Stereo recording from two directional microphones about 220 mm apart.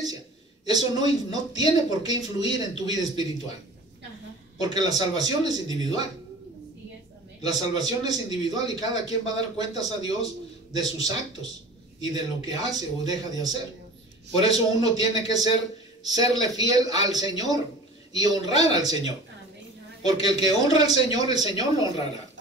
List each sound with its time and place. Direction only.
0.7 s a man's voice: 20° right (ahead or behind)
4.6 s a man's voice: 15° right (ahead or behind)
7.4 s a man's voice: 15° right (ahead or behind)
12.4 s a man's voice: 15° right (ahead or behind)
20.1 s a man's voice: 20° right (ahead or behind)